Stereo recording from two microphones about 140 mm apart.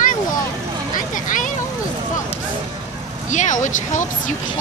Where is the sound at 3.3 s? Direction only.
60° left (ahead or behind).